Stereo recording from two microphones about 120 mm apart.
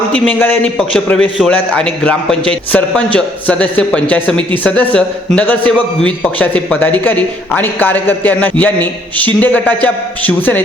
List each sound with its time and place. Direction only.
0.1 s a man's voice: 15° left (ahead or behind)
0.8 s a man's voice: 5° left (ahead or behind)